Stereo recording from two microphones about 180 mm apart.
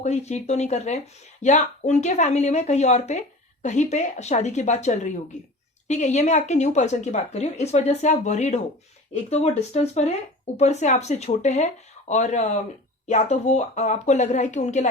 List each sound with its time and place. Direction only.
0.0 s speech: 40° left (ahead or behind)